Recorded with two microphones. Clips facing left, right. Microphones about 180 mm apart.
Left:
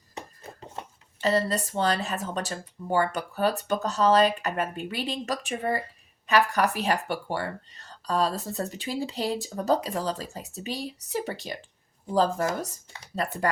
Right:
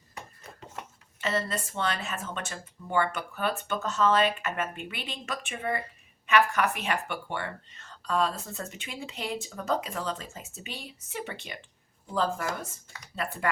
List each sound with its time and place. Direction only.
0.1 s speech: 30° left (ahead or behind)